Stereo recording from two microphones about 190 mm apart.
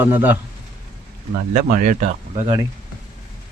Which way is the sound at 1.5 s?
40° right (ahead or behind).